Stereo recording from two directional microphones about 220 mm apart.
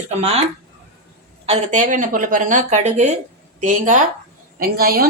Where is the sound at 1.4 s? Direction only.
30° right (ahead or behind).